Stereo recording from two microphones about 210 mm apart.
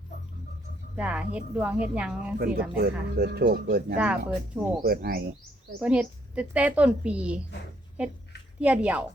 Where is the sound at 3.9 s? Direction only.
5° right (ahead or behind).